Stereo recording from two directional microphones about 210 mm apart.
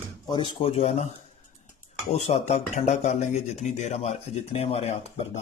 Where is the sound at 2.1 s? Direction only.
30° left (ahead or behind).